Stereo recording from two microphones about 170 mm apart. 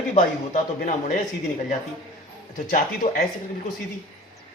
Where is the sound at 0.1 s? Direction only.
45° left (ahead or behind).